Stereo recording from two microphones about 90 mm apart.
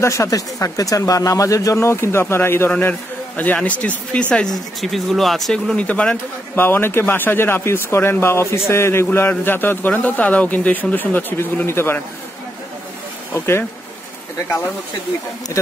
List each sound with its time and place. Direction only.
0.0 s speech: 35° left (ahead or behind)
2.7 s a man's voice: 15° left (ahead or behind); by 5.8 s centre (ahead or behind)
5.8 s speech: 15° left (ahead or behind)
6.5 s speech: 25° left (ahead or behind)
13.3 s speech: 25° left (ahead or behind)